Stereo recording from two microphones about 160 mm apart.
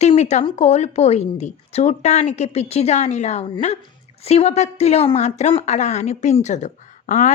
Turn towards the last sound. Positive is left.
turn(degrees=50)  # may be behind; listen again after turning